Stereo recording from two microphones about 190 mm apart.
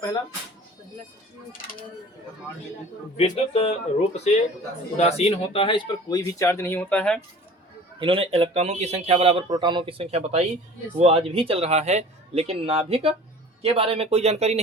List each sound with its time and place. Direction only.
3.2 s speech: 30° left (ahead or behind); by 7.2 s 5° left (ahead or behind)
7.9 s speech: 30° right (ahead or behind)